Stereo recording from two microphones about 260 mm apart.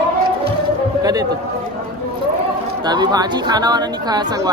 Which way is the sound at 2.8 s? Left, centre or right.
Centre.